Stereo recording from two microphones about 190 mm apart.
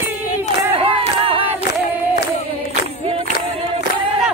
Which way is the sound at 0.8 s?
30° right (ahead or behind).